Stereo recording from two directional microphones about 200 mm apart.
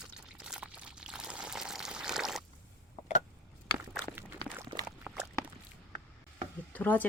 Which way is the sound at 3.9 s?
5° left (ahead or behind).